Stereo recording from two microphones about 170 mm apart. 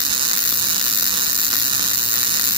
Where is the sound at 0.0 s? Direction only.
30° right (ahead or behind).